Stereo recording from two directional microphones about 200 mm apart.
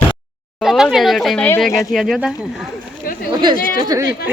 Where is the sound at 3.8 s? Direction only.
20° right (ahead or behind).